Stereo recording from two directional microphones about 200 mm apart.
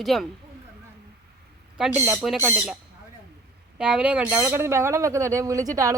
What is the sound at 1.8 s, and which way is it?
Speech, centre (ahead or behind).